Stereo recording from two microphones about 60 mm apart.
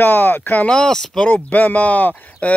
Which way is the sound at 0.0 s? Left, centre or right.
Left.